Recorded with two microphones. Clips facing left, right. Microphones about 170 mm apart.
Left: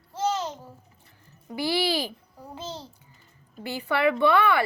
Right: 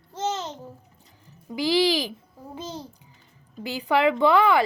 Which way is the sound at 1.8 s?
15° right (ahead or behind).